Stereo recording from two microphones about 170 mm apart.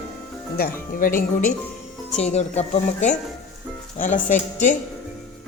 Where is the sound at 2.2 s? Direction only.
40° left (ahead or behind).